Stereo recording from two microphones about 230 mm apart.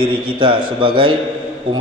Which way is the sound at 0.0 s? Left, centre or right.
Right.